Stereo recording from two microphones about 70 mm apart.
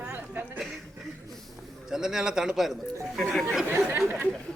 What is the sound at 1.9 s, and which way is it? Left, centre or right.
Speech, centre.